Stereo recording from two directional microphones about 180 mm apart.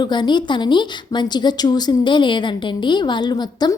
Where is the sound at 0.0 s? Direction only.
25° left (ahead or behind).